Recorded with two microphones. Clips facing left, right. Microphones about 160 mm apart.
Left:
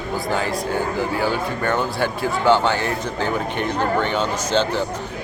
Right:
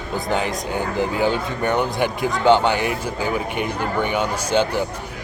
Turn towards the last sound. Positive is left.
turn(degrees=-10)  # may be behind; listen again after turning